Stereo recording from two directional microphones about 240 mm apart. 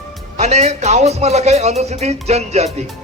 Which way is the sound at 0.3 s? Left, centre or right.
Right.